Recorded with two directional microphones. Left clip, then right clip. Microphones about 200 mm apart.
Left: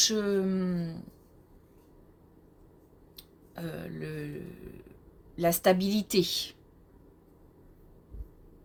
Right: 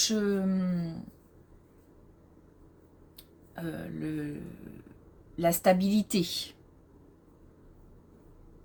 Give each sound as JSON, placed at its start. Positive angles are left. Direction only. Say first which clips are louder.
{"t": 0.0, "sound": "speech", "louder": "left 2 dB", "side_deg": 35}
{"t": 3.2, "sound": "speech", "louder": "even", "side_deg": 35}
{"t": 5.4, "sound": "speech", "louder": "even", "side_deg": 35}